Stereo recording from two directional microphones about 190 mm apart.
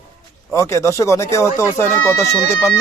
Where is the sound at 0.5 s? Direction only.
15° left (ahead or behind).